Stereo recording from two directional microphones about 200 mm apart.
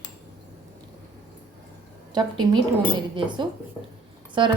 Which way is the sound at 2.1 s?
20° right (ahead or behind).